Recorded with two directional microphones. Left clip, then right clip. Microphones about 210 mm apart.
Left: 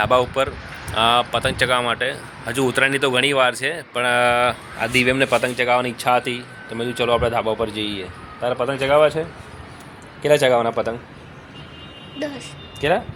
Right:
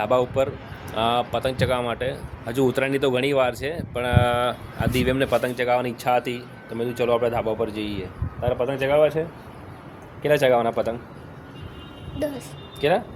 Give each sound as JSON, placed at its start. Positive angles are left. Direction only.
{"t": 0.0, "sound": "speech", "side_deg": 0}
{"t": 10.2, "sound": "a man's voice", "side_deg": 30}
{"t": 12.2, "sound": "speech", "side_deg": -5}
{"t": 12.8, "sound": "speech", "side_deg": 30}